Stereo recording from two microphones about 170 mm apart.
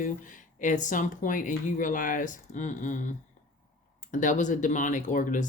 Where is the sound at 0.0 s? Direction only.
50° left (ahead or behind).